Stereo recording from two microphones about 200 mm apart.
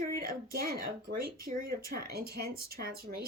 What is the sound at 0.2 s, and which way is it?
A woman's voice, 45° right (ahead or behind).